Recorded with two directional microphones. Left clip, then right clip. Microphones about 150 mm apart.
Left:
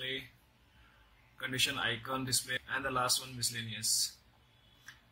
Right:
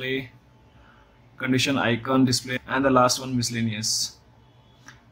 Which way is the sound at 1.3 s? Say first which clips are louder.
Right 10 dB; 30° right (ahead or behind).